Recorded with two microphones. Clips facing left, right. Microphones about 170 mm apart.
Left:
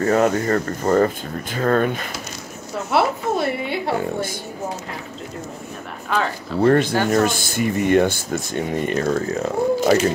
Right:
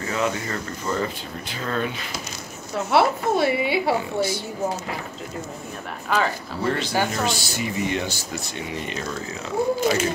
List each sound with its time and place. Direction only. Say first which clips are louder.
0.0 s speech: left 8 dB; 50° left (ahead or behind)
2.9 s a sound: even; centre (ahead or behind)
6.1 s speech: even; centre (ahead or behind)
6.6 s speech: left 7 dB; 50° left (ahead or behind)